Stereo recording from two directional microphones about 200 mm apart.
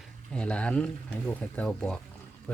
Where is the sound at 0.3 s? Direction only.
5° left (ahead or behind).